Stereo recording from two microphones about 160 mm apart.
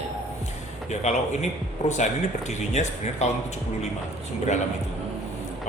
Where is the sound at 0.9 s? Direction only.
45° left (ahead or behind).